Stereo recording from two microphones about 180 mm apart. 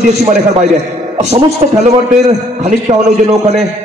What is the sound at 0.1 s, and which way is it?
A man's voice, 40° right (ahead or behind).